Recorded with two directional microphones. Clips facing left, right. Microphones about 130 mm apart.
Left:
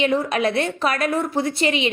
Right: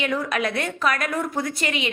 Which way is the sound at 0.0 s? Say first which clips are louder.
Left 5 dB; 30° left (ahead or behind).